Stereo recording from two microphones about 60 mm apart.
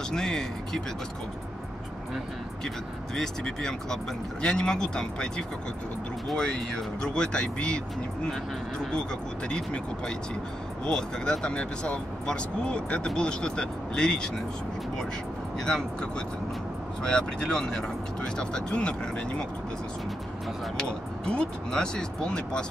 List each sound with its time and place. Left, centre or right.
0.1 s speech: centre
3.4 s speech: centre
9.5 s speech: centre
15.6 s speech: centre
21.3 s speech: centre